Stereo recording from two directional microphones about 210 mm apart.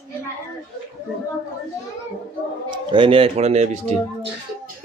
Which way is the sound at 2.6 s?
25° right (ahead or behind).